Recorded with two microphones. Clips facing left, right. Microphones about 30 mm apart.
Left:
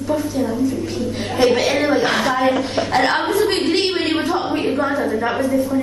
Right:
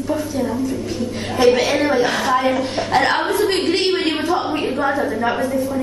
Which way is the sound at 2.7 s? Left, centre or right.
Centre.